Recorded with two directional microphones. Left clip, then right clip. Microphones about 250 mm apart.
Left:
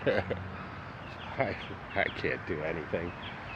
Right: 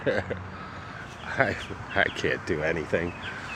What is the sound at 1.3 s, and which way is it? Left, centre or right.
Speech, right.